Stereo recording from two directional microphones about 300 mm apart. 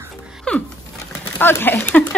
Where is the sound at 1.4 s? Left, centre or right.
Centre.